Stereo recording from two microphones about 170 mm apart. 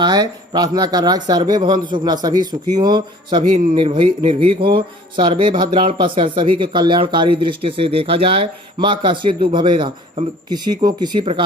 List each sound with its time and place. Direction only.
0.0 s speech: 25° right (ahead or behind)